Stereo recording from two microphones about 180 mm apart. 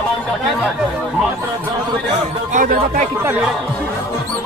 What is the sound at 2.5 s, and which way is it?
Music, 45° right (ahead or behind).